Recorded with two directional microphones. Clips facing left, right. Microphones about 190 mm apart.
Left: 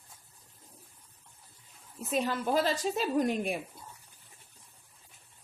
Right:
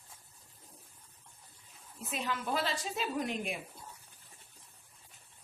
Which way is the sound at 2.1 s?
40° left (ahead or behind).